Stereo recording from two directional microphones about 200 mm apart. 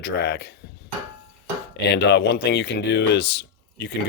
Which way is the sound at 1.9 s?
60° left (ahead or behind).